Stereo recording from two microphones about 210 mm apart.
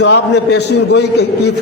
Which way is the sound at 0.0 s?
55° left (ahead or behind).